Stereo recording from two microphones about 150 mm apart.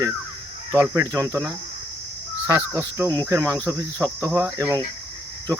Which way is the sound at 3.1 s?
25° right (ahead or behind).